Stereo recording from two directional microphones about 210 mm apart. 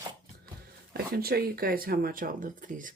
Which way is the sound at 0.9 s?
45° right (ahead or behind).